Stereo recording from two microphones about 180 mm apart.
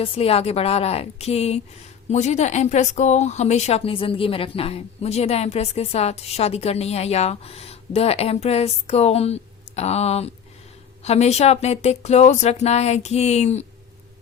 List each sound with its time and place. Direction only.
0.0 s speech: 30° left (ahead or behind)